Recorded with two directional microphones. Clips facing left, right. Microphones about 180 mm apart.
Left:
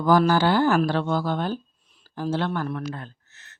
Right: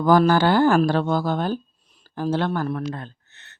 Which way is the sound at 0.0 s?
50° right (ahead or behind).